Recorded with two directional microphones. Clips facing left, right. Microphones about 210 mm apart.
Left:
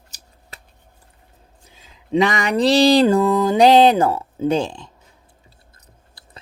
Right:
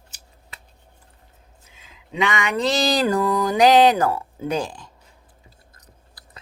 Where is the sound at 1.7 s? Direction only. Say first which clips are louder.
Left 14 dB; 35° left (ahead or behind).